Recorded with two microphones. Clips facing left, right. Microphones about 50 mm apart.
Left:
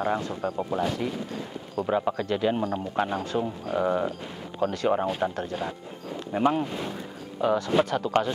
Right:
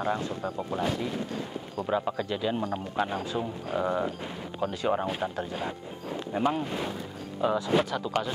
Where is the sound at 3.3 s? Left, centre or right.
Centre.